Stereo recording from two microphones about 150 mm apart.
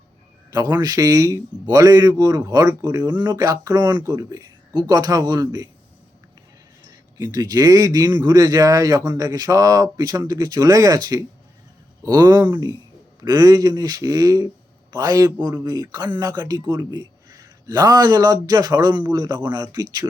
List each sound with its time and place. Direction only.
0.5 s a man's voice: 25° right (ahead or behind)
7.2 s a man's voice: 25° right (ahead or behind)